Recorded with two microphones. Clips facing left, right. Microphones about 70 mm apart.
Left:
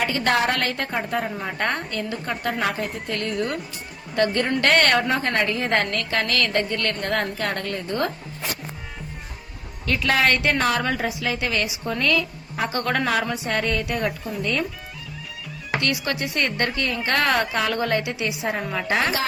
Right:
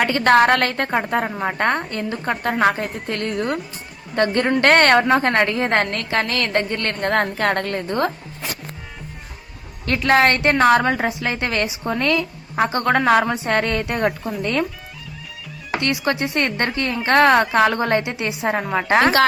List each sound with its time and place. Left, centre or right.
0.0 s a woman's voice: right
9.8 s a woman's voice: right
16.0 s a woman's voice: right